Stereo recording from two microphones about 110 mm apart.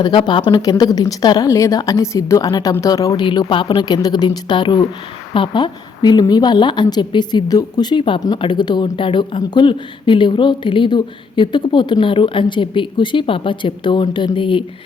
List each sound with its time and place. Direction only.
0.0 s speech: 45° left (ahead or behind)
3.2 s speech: 45° left (ahead or behind)